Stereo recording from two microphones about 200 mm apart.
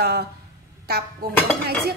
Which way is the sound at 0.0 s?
50° right (ahead or behind).